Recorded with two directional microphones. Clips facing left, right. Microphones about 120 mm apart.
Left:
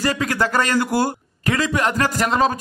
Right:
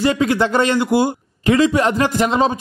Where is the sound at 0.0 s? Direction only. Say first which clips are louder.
Right 5 dB; 25° right (ahead or behind).